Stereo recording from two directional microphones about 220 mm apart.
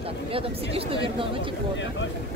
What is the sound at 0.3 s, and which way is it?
Speech, 25° right (ahead or behind).